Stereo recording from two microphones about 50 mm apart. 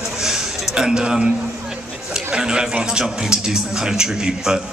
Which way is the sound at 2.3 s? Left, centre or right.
Centre.